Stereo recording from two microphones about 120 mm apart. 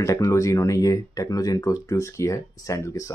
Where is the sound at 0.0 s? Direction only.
25° left (ahead or behind).